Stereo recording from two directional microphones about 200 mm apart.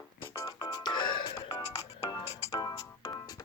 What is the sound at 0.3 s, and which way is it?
Music, 20° left (ahead or behind).